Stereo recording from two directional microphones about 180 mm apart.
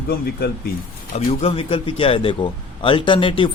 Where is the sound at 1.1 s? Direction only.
35° left (ahead or behind).